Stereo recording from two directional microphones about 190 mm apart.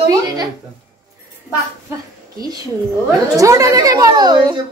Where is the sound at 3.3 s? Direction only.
15° right (ahead or behind).